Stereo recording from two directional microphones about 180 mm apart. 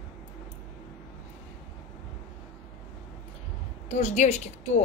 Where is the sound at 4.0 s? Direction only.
40° left (ahead or behind).